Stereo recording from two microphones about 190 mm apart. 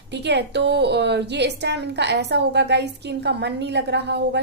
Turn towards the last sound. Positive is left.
turn(degrees=-60)  # may be behind; listen again after turning